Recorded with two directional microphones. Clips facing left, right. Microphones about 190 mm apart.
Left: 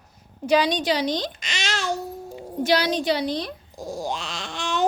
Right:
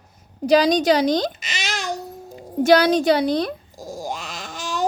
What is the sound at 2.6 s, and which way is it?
Speech, 50° right (ahead or behind).